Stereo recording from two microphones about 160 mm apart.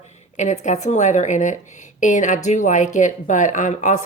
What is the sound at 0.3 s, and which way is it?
Speech, 50° left (ahead or behind).